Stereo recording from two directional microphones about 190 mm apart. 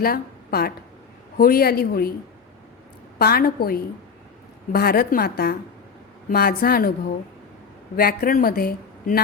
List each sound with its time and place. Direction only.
0.0 s a woman's voice: 55° left (ahead or behind)
3.2 s speech: 55° left (ahead or behind)
7.9 s speech: 50° left (ahead or behind)